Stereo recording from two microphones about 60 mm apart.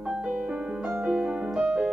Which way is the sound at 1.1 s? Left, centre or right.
Centre.